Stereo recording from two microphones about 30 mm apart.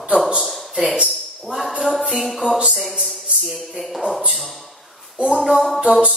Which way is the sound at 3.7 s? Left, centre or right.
Centre.